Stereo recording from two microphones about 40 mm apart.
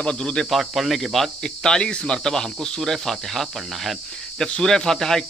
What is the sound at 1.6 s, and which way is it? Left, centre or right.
Speech, left.